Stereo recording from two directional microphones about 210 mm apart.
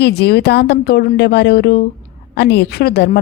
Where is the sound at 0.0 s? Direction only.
50° left (ahead or behind).